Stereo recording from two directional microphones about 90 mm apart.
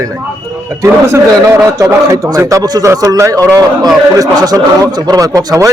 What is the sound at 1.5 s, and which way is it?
A man's voice, 35° right (ahead or behind).